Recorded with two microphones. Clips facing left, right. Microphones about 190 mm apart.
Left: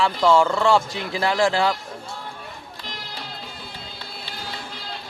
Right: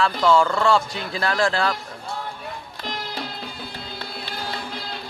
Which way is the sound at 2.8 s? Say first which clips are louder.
Right 8 dB; 55° right (ahead or behind).